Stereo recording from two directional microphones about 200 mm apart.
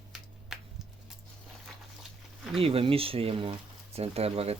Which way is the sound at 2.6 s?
30° right (ahead or behind).